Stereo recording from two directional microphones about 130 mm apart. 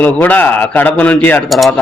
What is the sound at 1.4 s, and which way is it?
Speech, centre (ahead or behind).